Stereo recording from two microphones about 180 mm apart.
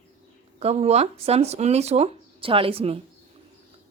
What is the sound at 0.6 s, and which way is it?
A woman's voice, 35° right (ahead or behind).